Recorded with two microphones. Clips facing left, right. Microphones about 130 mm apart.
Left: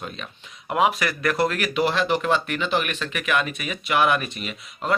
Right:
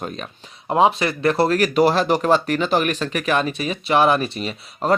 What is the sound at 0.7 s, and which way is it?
Speech, 30° right (ahead or behind).